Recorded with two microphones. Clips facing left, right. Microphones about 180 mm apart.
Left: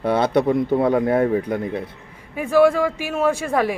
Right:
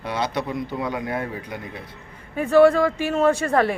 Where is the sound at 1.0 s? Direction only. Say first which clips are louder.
Left 10 dB; 35° left (ahead or behind).